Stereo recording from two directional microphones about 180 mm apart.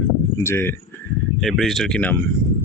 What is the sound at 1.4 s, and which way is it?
Speech, centre (ahead or behind).